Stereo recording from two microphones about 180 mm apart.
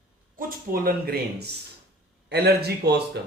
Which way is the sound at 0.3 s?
55° right (ahead or behind).